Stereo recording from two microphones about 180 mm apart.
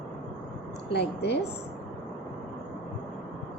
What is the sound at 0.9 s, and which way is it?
Speech, 65° left (ahead or behind).